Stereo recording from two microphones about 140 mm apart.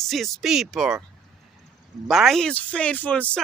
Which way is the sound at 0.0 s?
Centre (ahead or behind).